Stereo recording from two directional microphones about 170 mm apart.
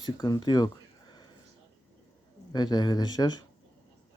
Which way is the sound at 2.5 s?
25° left (ahead or behind).